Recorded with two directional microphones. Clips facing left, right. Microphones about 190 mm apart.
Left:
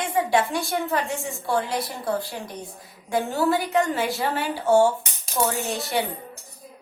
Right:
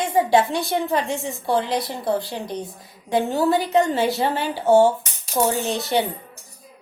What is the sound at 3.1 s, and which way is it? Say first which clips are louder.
Speech: right 3 dB; 20° right (ahead or behind).